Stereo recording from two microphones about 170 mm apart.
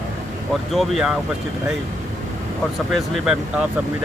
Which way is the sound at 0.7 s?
Centre (ahead or behind).